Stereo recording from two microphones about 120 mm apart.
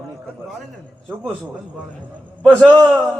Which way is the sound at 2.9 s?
25° right (ahead or behind).